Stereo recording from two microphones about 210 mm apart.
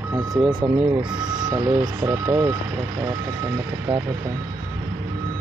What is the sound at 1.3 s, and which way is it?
Speech, 20° right (ahead or behind).